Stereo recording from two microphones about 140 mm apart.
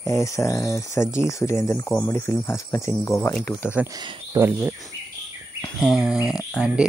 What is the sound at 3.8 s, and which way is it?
Speech, 10° right (ahead or behind).